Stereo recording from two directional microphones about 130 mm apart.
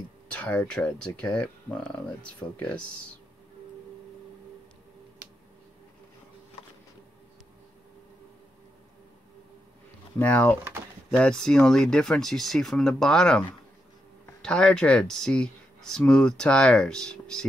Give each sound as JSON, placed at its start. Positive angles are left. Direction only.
{"t": 0.3, "sound": "speech", "side_deg": 10}
{"t": 10.1, "sound": "speech", "side_deg": 10}
{"t": 14.4, "sound": "speech", "side_deg": 5}